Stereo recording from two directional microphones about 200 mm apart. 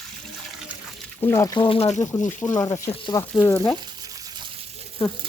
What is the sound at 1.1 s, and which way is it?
Speech, 15° left (ahead or behind).